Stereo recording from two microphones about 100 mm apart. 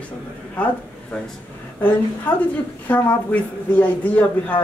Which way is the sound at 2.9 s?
20° left (ahead or behind).